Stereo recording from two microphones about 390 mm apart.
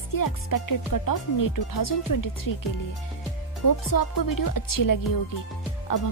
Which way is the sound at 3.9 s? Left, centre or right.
Left.